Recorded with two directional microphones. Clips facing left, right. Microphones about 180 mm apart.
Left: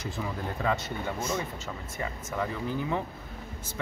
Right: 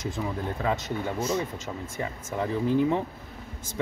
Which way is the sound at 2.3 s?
25° right (ahead or behind).